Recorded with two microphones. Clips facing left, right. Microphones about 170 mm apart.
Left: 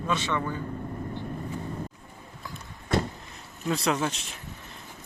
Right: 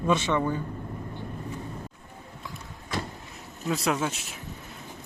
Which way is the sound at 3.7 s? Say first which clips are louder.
Even; centre (ahead or behind).